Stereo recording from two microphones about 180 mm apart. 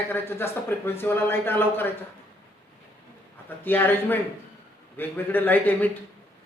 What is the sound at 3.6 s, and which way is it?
Speech, 10° left (ahead or behind).